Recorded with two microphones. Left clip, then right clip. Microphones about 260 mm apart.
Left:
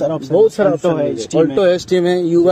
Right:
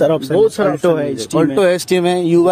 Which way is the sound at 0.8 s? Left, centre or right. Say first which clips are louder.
Right 1 dB; right.